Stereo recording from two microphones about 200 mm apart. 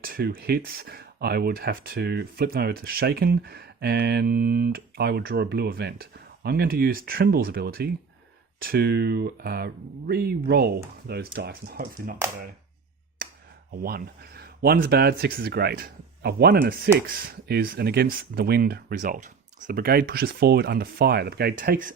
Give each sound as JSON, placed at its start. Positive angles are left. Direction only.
{"t": 0.0, "sound": "speech", "side_deg": -50}
{"t": 13.2, "sound": "a sound", "side_deg": -45}
{"t": 13.8, "sound": "speech", "side_deg": -50}